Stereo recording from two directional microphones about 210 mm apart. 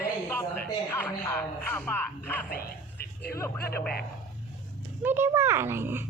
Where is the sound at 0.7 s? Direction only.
10° left (ahead or behind).